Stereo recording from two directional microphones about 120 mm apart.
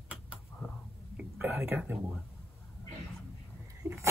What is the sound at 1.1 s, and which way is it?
Whispering, 15° right (ahead or behind).